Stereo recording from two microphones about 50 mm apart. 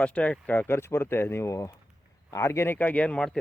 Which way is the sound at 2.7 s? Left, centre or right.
Left.